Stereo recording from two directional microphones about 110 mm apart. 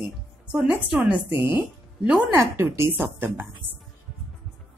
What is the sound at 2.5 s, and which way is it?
Speech, 25° right (ahead or behind).